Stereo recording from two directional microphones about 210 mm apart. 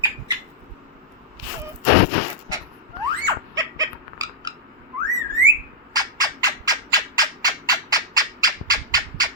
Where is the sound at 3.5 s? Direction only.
15° right (ahead or behind).